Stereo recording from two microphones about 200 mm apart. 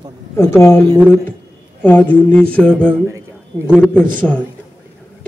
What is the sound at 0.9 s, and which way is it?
Speech, 5° right (ahead or behind).